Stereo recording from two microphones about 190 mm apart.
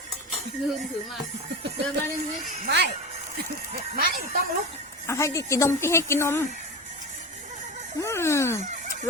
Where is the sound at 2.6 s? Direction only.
60° right (ahead or behind).